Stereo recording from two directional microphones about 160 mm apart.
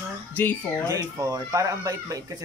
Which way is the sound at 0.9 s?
20° right (ahead or behind).